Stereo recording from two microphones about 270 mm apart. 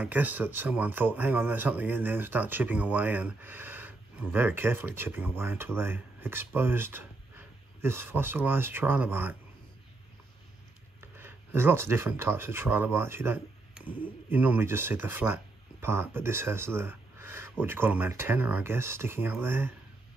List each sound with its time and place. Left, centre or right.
0.0 s speech: centre
11.0 s speech: centre